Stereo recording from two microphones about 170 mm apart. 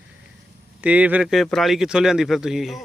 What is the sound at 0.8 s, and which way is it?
Speech, 10° right (ahead or behind).